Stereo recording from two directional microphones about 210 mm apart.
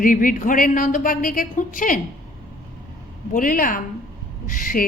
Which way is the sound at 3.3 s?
40° left (ahead or behind).